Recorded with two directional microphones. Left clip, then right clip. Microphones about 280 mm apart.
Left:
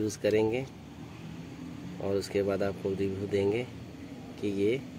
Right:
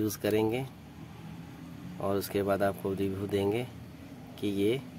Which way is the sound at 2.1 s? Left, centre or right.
Right.